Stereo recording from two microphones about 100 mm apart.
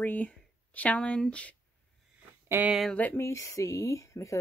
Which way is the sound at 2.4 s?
20° right (ahead or behind).